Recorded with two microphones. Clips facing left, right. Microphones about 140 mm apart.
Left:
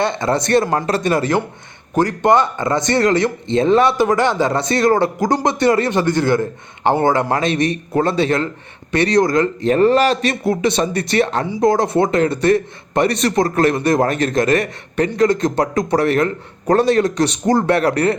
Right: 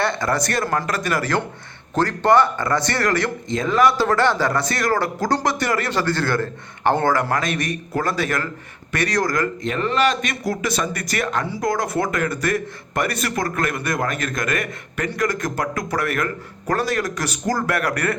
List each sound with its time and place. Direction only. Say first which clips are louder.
0.0 s speech: left 4 dB; 20° left (ahead or behind)
11.4 s speech: left 7 dB; 15° left (ahead or behind)